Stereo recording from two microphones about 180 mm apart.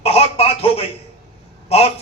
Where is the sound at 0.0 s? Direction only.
35° left (ahead or behind).